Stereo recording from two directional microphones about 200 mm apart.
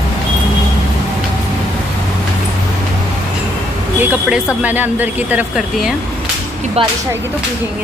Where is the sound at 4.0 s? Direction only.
5° right (ahead or behind).